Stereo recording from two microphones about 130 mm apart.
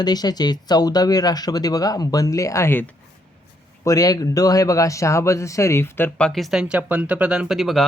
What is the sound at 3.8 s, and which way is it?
Speech, 30° left (ahead or behind).